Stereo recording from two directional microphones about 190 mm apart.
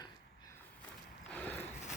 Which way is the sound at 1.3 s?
10° left (ahead or behind).